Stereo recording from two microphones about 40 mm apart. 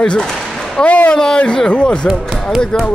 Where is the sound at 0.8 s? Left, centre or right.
Left.